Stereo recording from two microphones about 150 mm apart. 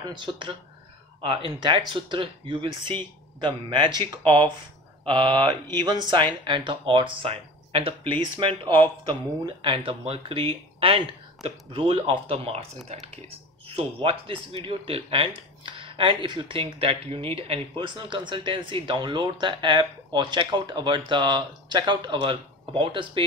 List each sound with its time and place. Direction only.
0.0 s speech: 30° right (ahead or behind)